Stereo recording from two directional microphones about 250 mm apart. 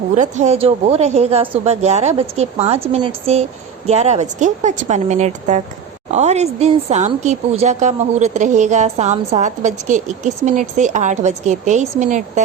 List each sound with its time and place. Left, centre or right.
0.2 s a woman's voice: right